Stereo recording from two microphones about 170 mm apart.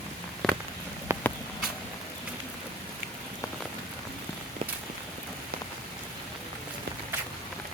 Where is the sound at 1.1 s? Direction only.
15° right (ahead or behind).